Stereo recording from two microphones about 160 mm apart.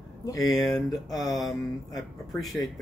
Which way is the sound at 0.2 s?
25° left (ahead or behind).